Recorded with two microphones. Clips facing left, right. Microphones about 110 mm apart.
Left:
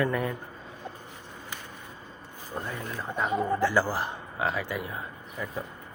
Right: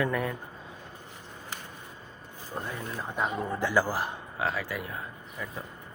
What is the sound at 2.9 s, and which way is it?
A man's voice, 10° right (ahead or behind).